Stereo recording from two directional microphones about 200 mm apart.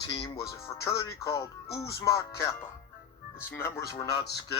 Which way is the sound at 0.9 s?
15° left (ahead or behind).